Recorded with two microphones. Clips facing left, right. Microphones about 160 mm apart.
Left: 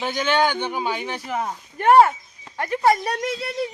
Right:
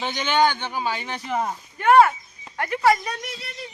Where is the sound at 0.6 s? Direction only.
15° left (ahead or behind).